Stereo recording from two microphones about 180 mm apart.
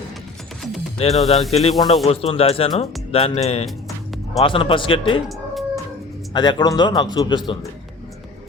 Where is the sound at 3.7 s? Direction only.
Centre (ahead or behind).